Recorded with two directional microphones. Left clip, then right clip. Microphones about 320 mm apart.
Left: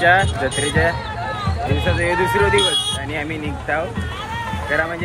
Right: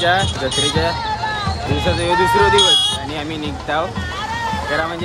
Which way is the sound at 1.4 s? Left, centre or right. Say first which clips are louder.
Right 2 dB; right.